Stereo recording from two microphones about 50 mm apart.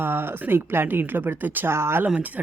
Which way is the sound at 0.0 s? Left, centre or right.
Right.